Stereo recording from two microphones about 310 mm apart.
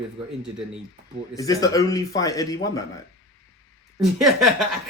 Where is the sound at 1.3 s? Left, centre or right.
Centre.